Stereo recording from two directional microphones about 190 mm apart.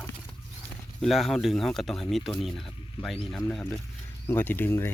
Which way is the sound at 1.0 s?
Centre (ahead or behind).